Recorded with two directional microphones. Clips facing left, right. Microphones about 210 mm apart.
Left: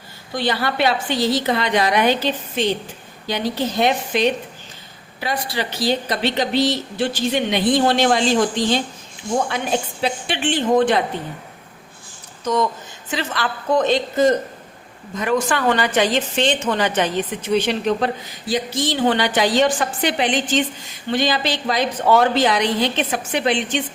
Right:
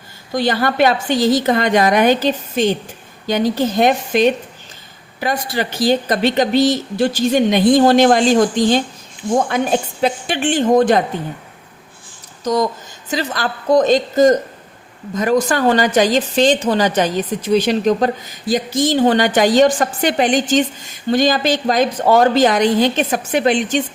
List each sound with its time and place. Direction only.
0.3 s a woman's voice: 45° right (ahead or behind)
13.1 s a woman's voice: 40° right (ahead or behind)